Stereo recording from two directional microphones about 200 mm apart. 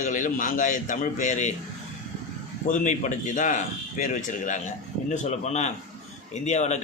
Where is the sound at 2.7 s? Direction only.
40° left (ahead or behind).